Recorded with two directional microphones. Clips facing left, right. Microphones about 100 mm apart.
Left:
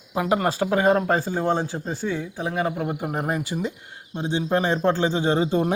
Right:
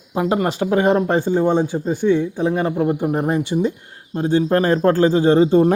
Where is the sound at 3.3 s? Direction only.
30° right (ahead or behind).